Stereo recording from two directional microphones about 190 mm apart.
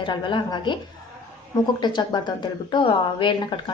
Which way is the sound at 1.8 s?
25° left (ahead or behind).